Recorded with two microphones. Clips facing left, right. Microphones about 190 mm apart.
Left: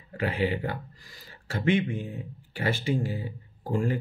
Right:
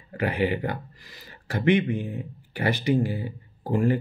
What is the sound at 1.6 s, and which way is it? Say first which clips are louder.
Speech: right 4 dB; 65° right (ahead or behind).